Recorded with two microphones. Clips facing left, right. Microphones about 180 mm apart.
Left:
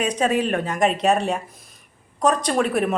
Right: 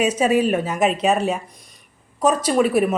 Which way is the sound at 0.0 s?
5° right (ahead or behind).